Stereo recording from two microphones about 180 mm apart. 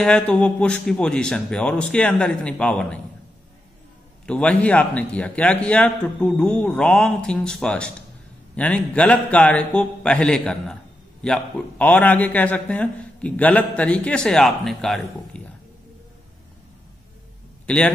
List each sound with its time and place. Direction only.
0.0 s a man's voice: 5° left (ahead or behind)
4.3 s a man's voice: 5° left (ahead or behind)
17.6 s a man's voice: 5° left (ahead or behind)